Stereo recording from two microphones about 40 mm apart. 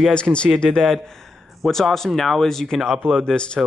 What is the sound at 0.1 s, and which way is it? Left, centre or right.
Speech, left.